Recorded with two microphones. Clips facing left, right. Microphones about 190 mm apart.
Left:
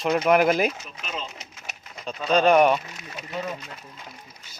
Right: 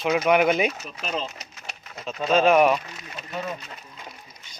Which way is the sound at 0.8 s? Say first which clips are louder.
Right 5 dB; 35° right (ahead or behind).